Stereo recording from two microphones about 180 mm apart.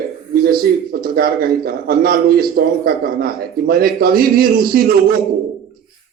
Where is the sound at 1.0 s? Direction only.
55° right (ahead or behind).